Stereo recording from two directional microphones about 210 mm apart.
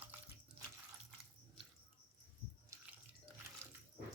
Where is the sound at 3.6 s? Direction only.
10° right (ahead or behind).